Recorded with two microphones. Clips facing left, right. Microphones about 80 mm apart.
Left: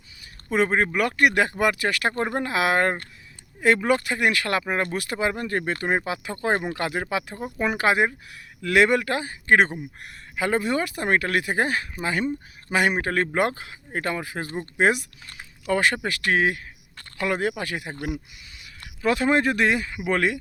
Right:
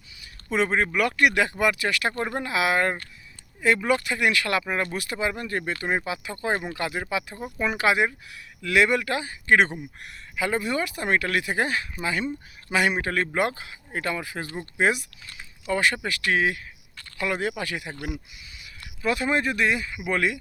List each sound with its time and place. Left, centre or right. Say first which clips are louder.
0.5 s speech: left 2 dB; left
2.1 s speech: left 2 dB; left
4.9 s speech: left 2 dB; left
5.3 s speech: left 3 dB; left
6.1 s speech: left 2 dB; left
18.5 s speech: left 1 dB; left
20.0 s speech: left 2 dB; left